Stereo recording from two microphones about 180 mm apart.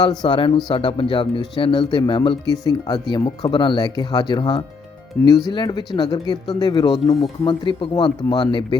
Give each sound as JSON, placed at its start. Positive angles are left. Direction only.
{"t": 0.0, "sound": "speech", "side_deg": 25}
{"t": 5.2, "sound": "speech", "side_deg": 10}
{"t": 5.5, "sound": "speech", "side_deg": 25}